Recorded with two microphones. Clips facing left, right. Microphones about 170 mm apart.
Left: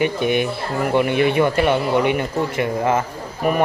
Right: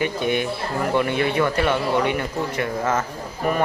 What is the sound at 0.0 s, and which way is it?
Speech, 20° left (ahead or behind).